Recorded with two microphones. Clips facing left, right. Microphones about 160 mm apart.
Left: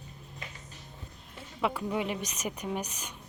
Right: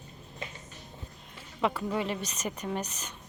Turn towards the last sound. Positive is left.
turn(degrees=10)  # may be behind; listen again after turning